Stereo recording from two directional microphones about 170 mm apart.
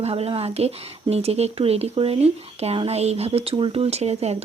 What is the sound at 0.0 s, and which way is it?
Speech, 35° right (ahead or behind).